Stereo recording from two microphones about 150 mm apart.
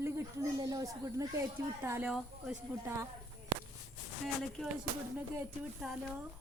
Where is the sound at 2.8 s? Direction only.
20° right (ahead or behind).